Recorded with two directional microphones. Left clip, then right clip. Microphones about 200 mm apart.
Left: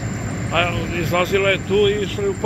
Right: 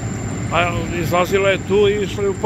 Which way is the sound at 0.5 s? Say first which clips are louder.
Right 1 dB; 10° right (ahead or behind).